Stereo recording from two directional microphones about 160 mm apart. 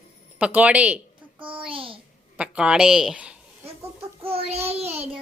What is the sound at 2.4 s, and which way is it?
Speech, 5° right (ahead or behind).